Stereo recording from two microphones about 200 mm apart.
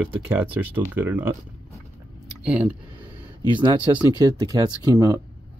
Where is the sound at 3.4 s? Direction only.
25° right (ahead or behind).